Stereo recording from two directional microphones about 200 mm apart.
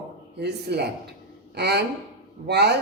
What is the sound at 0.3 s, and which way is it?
A woman's voice, 55° right (ahead or behind).